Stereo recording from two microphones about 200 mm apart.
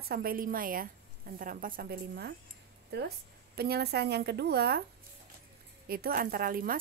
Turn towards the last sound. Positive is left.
turn(degrees=-45)  # may be behind; listen again after turning